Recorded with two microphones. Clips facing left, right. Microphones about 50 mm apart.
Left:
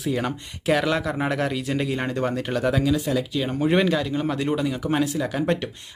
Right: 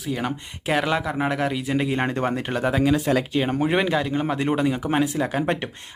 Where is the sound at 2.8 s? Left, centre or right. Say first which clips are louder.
Right 2 dB; right.